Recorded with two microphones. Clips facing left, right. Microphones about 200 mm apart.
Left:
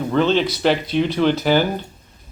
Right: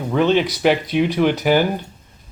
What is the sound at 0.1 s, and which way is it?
Speech, 10° right (ahead or behind).